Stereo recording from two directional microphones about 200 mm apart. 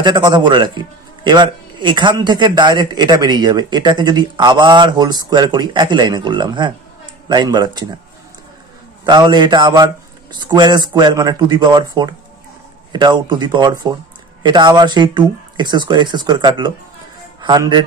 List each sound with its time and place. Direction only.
0.0 s a man's voice: 20° right (ahead or behind)
9.0 s a man's voice: 20° right (ahead or behind)